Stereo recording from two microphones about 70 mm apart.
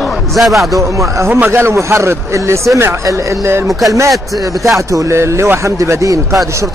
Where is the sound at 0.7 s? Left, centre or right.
Right.